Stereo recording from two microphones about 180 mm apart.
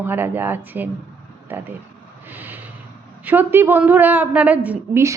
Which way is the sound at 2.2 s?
10° right (ahead or behind).